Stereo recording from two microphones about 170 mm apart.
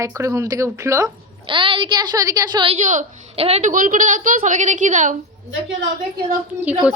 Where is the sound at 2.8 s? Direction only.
45° right (ahead or behind).